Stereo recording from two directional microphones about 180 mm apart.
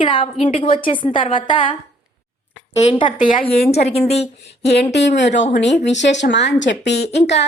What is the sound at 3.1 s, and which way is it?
Speech, 45° left (ahead or behind).